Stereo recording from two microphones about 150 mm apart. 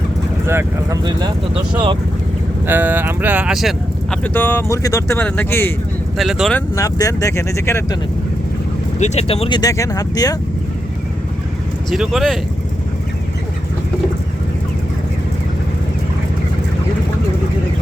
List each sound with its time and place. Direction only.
0.4 s speech: 15° right (ahead or behind)
1.5 s speech: 35° right (ahead or behind)
2.6 s speech: 15° right (ahead or behind)
4.2 s speech: 15° left (ahead or behind)
6.1 s speech: centre (ahead or behind)
6.7 s speech: 20° left (ahead or behind)
9.0 s speech: 45° left (ahead or behind)
9.6 s speech: 20° left (ahead or behind)
11.9 s speech: centre (ahead or behind)